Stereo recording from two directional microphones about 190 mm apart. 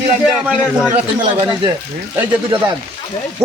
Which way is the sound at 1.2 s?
30° right (ahead or behind).